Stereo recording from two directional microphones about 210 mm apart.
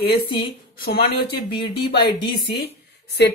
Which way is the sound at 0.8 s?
50° left (ahead or behind).